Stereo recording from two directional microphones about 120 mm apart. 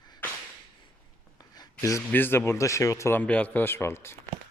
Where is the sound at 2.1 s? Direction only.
15° left (ahead or behind).